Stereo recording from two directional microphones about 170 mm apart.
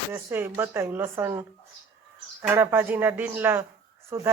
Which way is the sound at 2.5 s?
15° right (ahead or behind).